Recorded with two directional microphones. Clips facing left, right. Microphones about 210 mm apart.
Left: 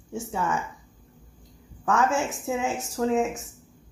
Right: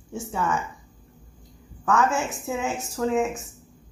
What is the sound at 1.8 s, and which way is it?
Speech, 25° left (ahead or behind).